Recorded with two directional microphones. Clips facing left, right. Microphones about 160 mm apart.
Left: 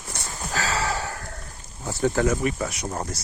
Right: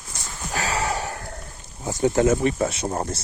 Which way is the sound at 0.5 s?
20° right (ahead or behind).